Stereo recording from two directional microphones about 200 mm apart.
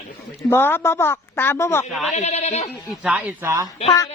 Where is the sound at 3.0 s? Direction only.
10° right (ahead or behind).